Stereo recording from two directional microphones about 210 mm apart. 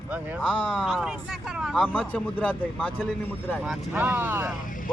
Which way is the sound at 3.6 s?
5° right (ahead or behind).